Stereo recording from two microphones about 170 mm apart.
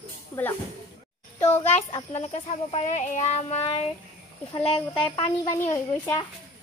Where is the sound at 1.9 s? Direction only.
40° left (ahead or behind).